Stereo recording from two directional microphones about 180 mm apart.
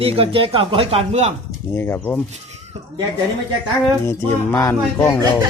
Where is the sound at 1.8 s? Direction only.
15° left (ahead or behind).